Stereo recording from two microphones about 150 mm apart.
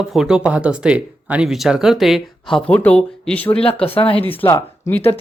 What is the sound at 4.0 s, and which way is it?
Speech, 35° left (ahead or behind).